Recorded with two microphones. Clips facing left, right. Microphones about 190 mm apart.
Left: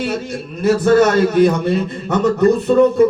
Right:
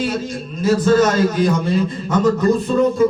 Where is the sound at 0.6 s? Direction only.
65° left (ahead or behind).